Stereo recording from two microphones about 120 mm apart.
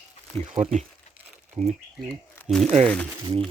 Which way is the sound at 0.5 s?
70° right (ahead or behind).